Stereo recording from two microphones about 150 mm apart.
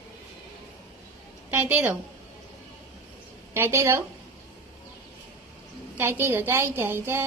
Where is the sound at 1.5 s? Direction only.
10° right (ahead or behind).